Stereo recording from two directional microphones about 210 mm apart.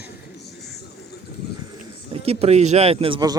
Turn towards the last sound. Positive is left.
turn(degrees=-20)  # may be behind; listen again after turning